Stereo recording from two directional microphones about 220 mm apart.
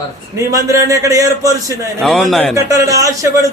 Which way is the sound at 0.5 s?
15° right (ahead or behind).